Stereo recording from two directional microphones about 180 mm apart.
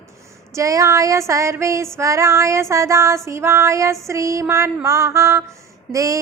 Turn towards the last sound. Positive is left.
turn(degrees=-20)  # may be behind; listen again after turning